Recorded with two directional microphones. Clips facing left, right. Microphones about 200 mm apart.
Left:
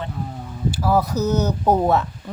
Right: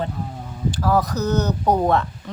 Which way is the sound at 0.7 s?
10° left (ahead or behind).